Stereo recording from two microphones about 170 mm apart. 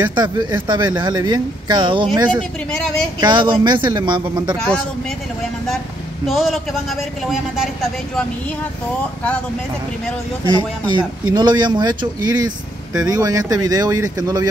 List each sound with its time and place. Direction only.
0.0 s speech: 25° right (ahead or behind)
3.2 s speech: 25° right (ahead or behind)
6.2 s speech: centre (ahead or behind)
10.4 s speech: 25° right (ahead or behind)